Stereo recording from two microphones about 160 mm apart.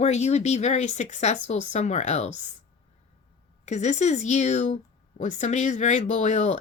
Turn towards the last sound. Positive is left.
turn(degrees=45)  # may be behind; listen again after turning